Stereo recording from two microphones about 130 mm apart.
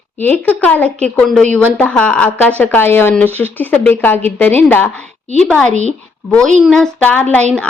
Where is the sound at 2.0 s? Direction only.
10° left (ahead or behind).